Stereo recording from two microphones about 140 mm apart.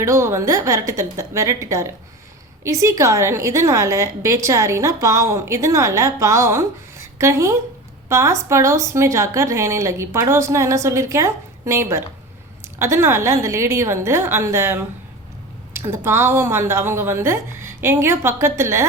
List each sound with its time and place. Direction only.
0.0 s a woman's voice: 20° right (ahead or behind)